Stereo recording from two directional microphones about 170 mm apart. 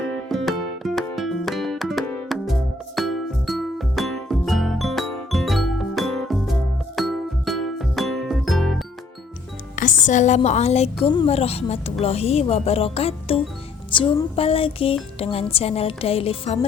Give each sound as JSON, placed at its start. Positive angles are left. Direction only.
{"t": 0.1, "sound": "music", "side_deg": 0}
{"t": 9.7, "sound": "music", "side_deg": 50}
{"t": 11.1, "sound": "a woman's voice", "side_deg": 30}